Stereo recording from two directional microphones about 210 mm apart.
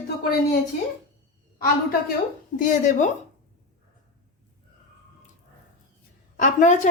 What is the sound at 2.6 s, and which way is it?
Speech, 35° left (ahead or behind).